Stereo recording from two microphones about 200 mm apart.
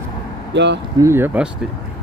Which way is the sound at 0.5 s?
60° right (ahead or behind).